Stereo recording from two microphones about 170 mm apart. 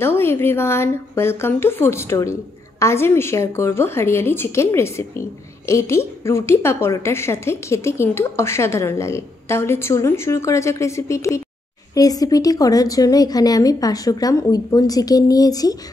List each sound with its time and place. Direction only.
0.0 s a woman's voice: 15° left (ahead or behind)